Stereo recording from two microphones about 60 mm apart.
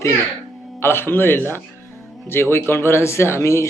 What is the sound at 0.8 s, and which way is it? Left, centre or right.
Speech, left.